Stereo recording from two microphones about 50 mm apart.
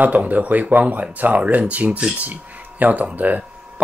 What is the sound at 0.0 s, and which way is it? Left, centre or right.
Speech, right.